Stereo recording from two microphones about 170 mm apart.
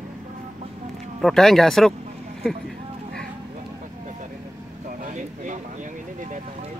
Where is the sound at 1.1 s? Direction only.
Centre (ahead or behind).